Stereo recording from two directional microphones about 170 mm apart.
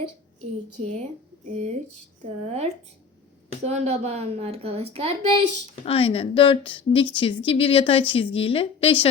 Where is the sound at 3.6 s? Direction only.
40° right (ahead or behind).